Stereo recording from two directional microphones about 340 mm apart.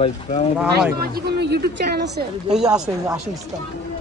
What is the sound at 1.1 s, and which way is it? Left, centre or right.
Speech, right.